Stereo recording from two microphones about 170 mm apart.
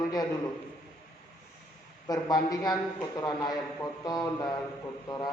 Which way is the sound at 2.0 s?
20° left (ahead or behind).